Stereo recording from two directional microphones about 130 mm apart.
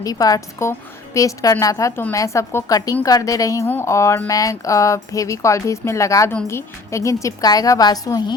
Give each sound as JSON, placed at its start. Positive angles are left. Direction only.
{"t": 0.0, "sound": "a woman's voice", "side_deg": 30}